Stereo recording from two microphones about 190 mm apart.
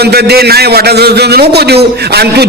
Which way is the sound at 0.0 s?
55° right (ahead or behind).